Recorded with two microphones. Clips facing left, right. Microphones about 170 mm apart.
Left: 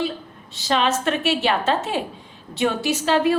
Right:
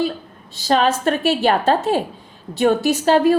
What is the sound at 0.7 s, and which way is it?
A woman's voice, 40° right (ahead or behind).